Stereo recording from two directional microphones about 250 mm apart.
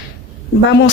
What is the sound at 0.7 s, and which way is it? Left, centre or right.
Speech, left.